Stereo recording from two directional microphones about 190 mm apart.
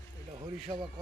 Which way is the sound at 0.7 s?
25° right (ahead or behind).